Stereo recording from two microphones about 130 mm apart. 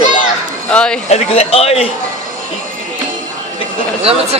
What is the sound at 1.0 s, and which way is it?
Speech, 55° left (ahead or behind).